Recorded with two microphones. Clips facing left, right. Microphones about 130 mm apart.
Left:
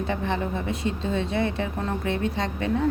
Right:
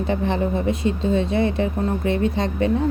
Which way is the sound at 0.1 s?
15° right (ahead or behind).